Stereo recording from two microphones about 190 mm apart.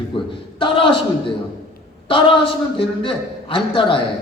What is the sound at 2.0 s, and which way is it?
A man's voice, 25° left (ahead or behind).